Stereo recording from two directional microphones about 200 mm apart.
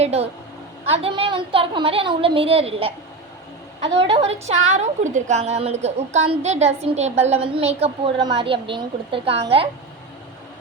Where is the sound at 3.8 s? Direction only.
65° right (ahead or behind).